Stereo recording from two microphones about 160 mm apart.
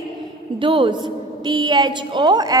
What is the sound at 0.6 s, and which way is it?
A woman's voice, 35° right (ahead or behind).